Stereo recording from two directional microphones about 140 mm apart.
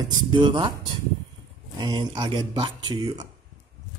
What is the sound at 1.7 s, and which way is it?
Speech, 30° right (ahead or behind).